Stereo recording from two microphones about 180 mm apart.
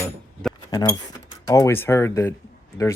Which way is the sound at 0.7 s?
20° left (ahead or behind).